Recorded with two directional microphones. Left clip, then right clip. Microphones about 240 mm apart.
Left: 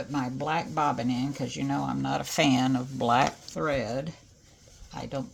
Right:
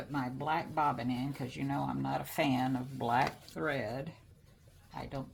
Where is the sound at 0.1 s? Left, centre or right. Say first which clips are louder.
Left 4 dB; left.